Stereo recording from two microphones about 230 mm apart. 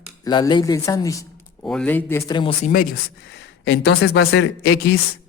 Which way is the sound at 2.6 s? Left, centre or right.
Left.